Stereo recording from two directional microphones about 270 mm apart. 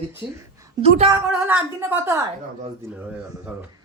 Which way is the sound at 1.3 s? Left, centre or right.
Centre.